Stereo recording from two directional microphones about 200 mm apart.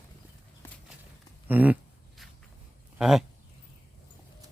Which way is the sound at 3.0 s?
Centre (ahead or behind).